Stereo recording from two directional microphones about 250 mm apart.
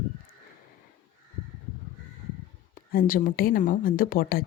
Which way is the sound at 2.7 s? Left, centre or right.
Left.